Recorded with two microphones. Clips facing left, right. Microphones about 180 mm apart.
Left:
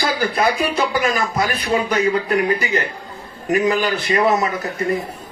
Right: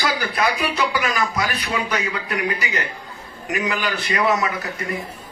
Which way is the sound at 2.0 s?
30° left (ahead or behind).